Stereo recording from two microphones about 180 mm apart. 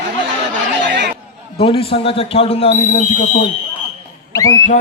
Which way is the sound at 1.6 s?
30° left (ahead or behind).